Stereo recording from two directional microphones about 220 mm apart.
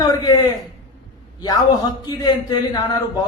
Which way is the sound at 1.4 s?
20° left (ahead or behind).